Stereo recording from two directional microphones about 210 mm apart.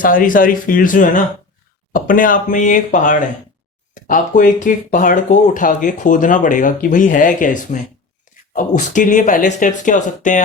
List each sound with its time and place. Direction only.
0.0 s speech: 40° left (ahead or behind)